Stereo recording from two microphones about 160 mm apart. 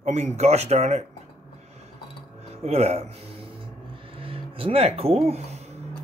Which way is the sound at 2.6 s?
40° right (ahead or behind).